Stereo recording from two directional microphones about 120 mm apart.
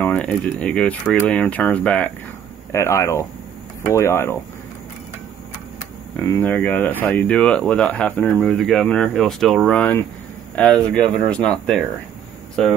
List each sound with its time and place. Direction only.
0.0 s speech: 10° left (ahead or behind)
2.7 s speech: 25° left (ahead or behind)
6.1 s speech: 20° left (ahead or behind)